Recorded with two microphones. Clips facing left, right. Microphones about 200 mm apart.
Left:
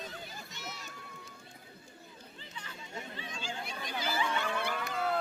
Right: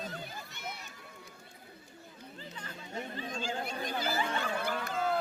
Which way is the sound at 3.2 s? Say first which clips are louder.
Right 7 dB; 40° right (ahead or behind).